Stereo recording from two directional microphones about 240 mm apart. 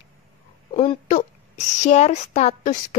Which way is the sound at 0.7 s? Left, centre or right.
Left.